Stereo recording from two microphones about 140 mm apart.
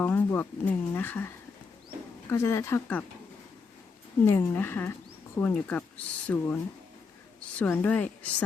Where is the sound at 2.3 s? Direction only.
20° left (ahead or behind).